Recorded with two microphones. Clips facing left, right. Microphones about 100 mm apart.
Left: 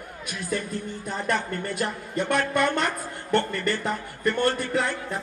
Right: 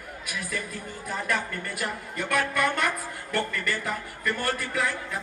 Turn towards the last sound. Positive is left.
turn(degrees=25)  # may be behind; listen again after turning